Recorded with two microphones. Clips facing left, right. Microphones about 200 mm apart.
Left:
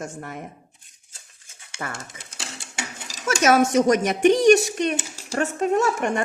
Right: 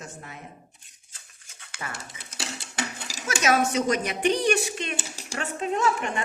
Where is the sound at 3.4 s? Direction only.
50° left (ahead or behind).